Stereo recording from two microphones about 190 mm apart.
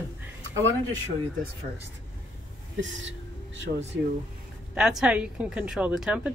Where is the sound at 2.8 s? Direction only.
75° right (ahead or behind).